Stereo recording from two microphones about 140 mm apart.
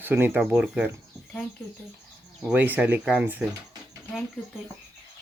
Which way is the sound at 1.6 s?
10° left (ahead or behind).